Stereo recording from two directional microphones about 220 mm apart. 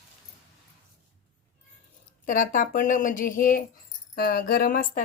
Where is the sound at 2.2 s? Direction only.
35° left (ahead or behind).